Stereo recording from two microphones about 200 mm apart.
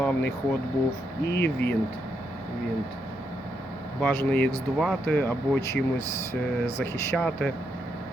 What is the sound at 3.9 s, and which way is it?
Speech, 10° left (ahead or behind).